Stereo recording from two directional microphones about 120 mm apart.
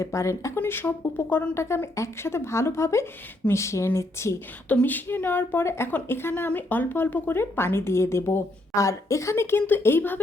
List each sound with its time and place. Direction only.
0.0 s speech: 25° left (ahead or behind)